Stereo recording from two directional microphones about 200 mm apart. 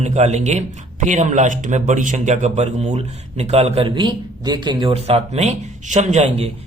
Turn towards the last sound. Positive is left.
turn(degrees=-30)  # may be behind; listen again after turning